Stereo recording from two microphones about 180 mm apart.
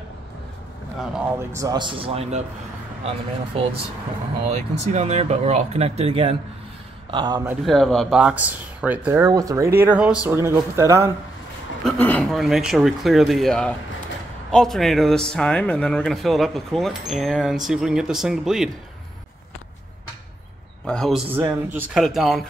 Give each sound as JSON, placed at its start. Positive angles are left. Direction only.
{"t": 1.5, "sound": "speech", "side_deg": -20}
{"t": 4.9, "sound": "speech", "side_deg": -40}
{"t": 7.6, "sound": "speech", "side_deg": 0}
{"t": 11.8, "sound": "speech", "side_deg": 5}
{"t": 20.8, "sound": "speech", "side_deg": 5}
{"t": 21.3, "sound": "speech", "side_deg": -10}